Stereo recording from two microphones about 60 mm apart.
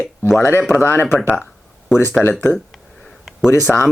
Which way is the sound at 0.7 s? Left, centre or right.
Left.